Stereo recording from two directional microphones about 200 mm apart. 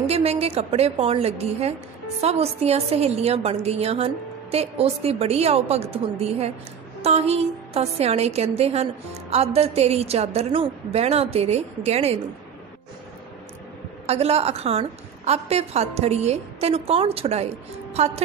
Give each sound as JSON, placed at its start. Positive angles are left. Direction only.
{"t": 0.0, "sound": "a woman's voice", "side_deg": -30}
{"t": 14.0, "sound": "a woman's voice", "side_deg": -30}